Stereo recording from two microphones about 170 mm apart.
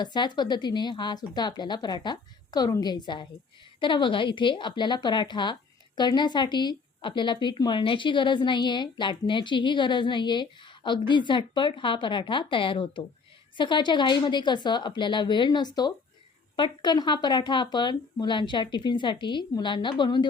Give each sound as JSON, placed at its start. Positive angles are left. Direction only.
{"t": 0.0, "sound": "speech", "side_deg": 25}